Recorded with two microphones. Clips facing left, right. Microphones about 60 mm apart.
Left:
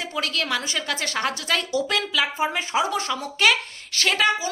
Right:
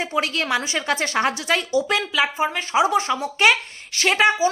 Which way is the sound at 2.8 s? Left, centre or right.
Right.